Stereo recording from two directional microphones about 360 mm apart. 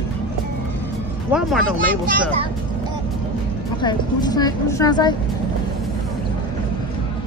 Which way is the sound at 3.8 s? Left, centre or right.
Centre.